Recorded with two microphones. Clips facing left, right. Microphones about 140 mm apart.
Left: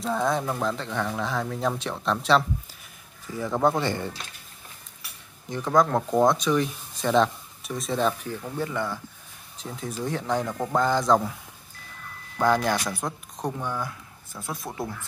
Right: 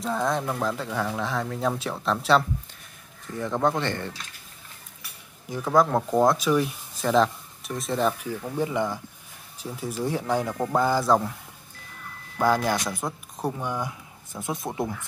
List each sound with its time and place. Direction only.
0.0 s speech: centre (ahead or behind)
5.5 s speech: 5° right (ahead or behind)
12.4 s speech: 5° right (ahead or behind)